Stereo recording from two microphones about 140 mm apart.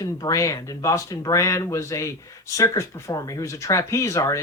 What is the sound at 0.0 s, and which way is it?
Speech, 25° left (ahead or behind).